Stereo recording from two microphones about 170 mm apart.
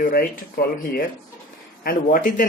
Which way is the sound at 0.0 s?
60° left (ahead or behind).